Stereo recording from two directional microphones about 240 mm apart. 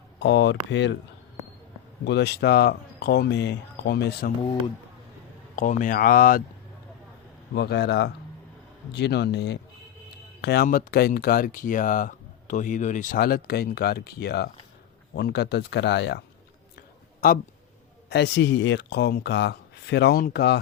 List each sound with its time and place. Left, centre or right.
0.2 s speech: left
2.0 s speech: left
5.5 s speech: left
7.5 s speech: left
18.1 s speech: left